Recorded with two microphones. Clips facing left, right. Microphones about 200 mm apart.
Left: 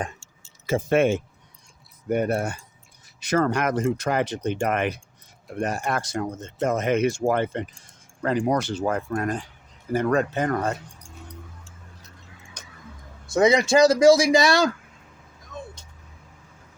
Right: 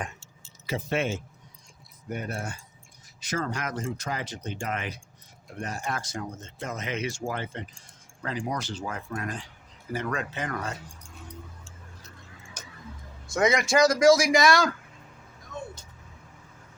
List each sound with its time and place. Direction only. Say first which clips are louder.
0.7 s speech: left 8 dB; 50° left (ahead or behind)
6.6 s speech: left 11 dB; 55° left (ahead or behind)
12.6 s vehicle: right 1 dB; 10° right (ahead or behind)
13.3 s speech: left 5 dB; 30° left (ahead or behind)